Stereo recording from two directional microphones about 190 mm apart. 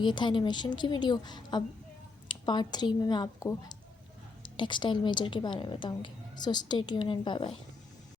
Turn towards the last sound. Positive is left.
turn(degrees=25)  # may be behind; listen again after turning